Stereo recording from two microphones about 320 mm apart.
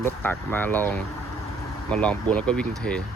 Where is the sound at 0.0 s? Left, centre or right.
Centre.